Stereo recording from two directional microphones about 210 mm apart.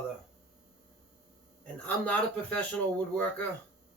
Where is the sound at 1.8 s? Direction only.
5° left (ahead or behind).